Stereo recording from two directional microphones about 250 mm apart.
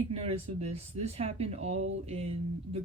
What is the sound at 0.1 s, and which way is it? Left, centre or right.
Speech, right.